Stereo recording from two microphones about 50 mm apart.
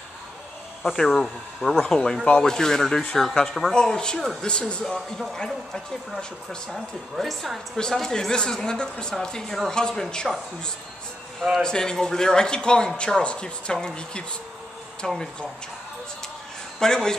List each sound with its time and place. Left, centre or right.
0.8 s a man's voice: centre
4.8 s a man's voice: centre
7.7 s a man's voice: centre
11.6 s a man's voice: centre
16.8 s a man's voice: centre